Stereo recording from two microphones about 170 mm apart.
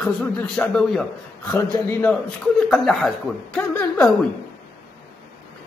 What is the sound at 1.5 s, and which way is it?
Speech, 15° left (ahead or behind).